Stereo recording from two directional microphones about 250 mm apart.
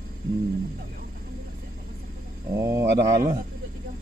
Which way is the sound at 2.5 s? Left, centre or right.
Centre.